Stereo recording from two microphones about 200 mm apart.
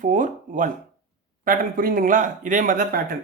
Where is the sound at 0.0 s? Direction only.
40° right (ahead or behind).